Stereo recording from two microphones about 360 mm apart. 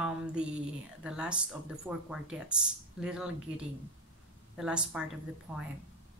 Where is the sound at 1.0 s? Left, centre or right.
Centre.